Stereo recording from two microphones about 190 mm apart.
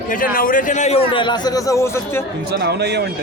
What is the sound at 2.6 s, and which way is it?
Speech, 60° right (ahead or behind).